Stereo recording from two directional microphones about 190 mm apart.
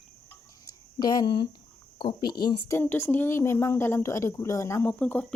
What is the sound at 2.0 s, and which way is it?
Speech, 25° left (ahead or behind).